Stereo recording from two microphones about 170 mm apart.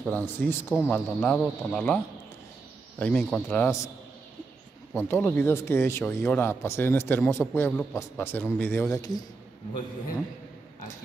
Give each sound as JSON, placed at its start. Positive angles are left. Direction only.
{"t": 0.0, "sound": "speech", "side_deg": 10}
{"t": 3.0, "sound": "speech", "side_deg": 5}
{"t": 3.6, "sound": "speech", "side_deg": 20}
{"t": 4.9, "sound": "speech", "side_deg": 15}